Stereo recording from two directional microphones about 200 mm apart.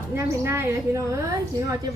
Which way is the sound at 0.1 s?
15° right (ahead or behind).